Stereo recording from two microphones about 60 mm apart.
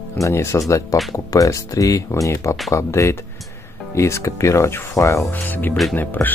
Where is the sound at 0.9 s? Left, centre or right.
Left.